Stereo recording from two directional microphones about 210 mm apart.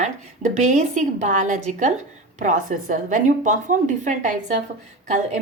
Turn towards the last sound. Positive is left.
turn(degrees=-35)  # may be behind; listen again after turning